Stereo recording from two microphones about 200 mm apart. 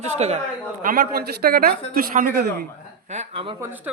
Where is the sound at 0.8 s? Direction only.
45° right (ahead or behind).